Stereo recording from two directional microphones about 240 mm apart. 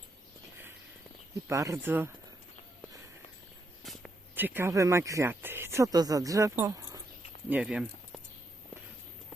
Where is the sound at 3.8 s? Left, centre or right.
Centre.